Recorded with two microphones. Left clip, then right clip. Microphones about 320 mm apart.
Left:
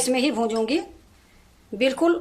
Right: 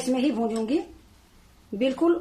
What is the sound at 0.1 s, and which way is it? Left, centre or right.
Speech, left.